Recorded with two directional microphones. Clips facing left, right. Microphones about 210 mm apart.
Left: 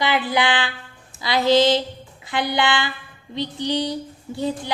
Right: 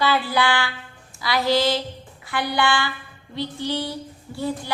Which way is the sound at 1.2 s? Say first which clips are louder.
Left 4 dB; 20° left (ahead or behind).